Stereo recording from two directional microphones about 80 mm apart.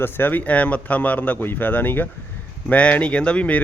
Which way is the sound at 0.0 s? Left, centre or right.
Left.